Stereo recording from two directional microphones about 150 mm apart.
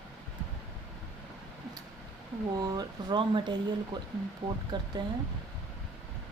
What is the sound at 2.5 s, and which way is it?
Speech, 25° right (ahead or behind).